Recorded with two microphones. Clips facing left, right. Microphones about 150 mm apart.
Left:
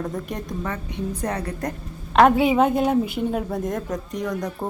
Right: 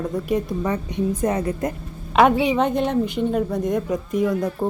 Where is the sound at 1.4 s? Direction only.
25° right (ahead or behind).